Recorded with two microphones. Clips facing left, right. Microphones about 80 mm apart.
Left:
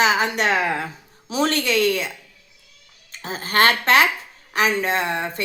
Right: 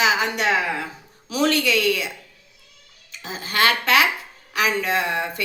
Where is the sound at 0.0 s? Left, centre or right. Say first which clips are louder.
Left 1 dB; left.